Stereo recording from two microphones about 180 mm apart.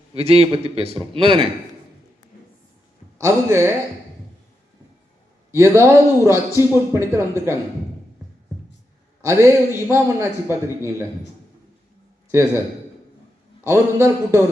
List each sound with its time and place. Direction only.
0.1 s a man's voice: 35° right (ahead or behind)
3.2 s a man's voice: 15° right (ahead or behind)
5.5 s a man's voice: 15° right (ahead or behind)
9.2 s a man's voice: 15° right (ahead or behind)
12.3 s a man's voice: 15° right (ahead or behind)
13.7 s a man's voice: 15° right (ahead or behind)